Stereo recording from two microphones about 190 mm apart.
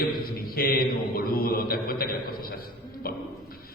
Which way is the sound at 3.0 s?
50° left (ahead or behind).